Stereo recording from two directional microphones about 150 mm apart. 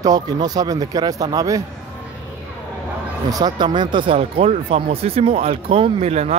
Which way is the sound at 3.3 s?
25° right (ahead or behind).